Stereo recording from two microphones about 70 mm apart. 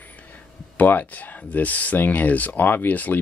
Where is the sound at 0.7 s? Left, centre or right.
Left.